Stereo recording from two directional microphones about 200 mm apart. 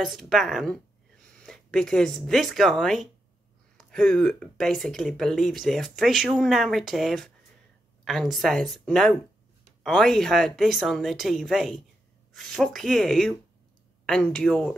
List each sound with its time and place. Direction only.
0.0 s a woman's voice: centre (ahead or behind)